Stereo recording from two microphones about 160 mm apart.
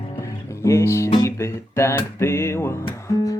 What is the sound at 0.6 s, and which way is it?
Music, 15° left (ahead or behind).